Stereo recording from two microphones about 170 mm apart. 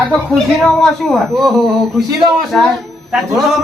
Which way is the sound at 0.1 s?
Centre (ahead or behind).